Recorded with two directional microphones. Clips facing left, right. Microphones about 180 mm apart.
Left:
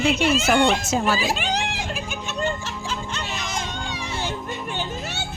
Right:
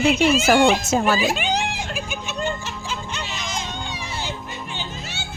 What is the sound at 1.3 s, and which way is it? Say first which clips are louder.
Music: right 2 dB; centre (ahead or behind).